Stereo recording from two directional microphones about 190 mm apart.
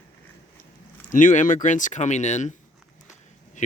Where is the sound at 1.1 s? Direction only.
45° left (ahead or behind).